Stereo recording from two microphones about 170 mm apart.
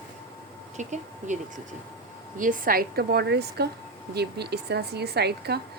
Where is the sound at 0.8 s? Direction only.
45° right (ahead or behind).